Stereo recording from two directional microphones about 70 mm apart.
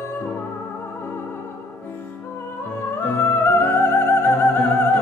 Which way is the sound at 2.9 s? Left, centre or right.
Left.